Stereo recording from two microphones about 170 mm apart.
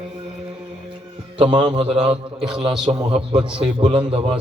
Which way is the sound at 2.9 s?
30° right (ahead or behind).